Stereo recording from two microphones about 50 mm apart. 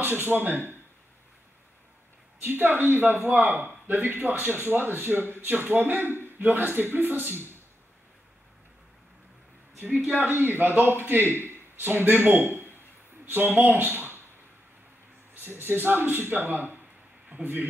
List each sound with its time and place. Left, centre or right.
0.0 s speech: right
2.4 s speech: right
9.8 s speech: right
10.2 s a man's voice: right
15.3 s speech: right